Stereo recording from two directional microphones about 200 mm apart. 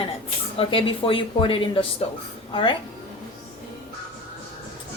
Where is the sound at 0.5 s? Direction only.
25° left (ahead or behind).